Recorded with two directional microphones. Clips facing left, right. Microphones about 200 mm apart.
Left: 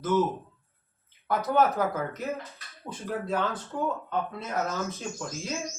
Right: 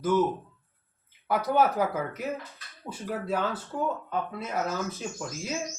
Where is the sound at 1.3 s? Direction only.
10° right (ahead or behind).